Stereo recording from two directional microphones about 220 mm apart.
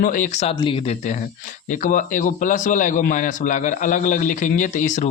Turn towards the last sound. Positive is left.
turn(degrees=35)  # may be behind; listen again after turning